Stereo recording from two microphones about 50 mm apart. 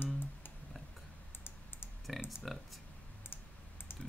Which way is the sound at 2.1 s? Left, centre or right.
Centre.